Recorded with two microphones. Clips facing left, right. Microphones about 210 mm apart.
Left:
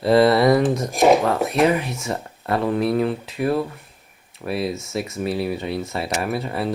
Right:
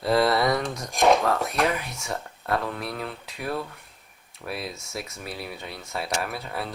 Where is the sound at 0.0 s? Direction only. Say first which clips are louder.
Left 7 dB; centre (ahead or behind).